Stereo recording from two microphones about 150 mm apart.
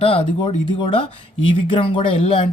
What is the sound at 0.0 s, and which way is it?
Speech, 40° left (ahead or behind).